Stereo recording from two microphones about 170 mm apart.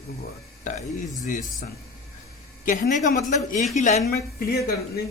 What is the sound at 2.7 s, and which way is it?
Speech, 50° left (ahead or behind).